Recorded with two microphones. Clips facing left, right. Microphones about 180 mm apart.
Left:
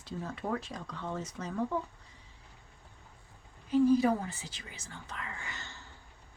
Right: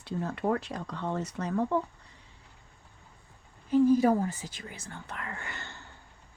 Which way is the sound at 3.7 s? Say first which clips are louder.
Right 3 dB; 45° right (ahead or behind).